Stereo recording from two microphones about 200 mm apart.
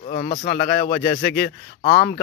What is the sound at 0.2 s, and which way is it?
Speech, 30° left (ahead or behind).